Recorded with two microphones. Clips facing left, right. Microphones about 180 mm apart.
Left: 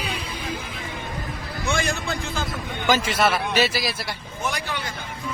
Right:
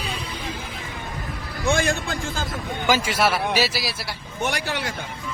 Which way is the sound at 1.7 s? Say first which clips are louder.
Right 2 dB; 50° right (ahead or behind).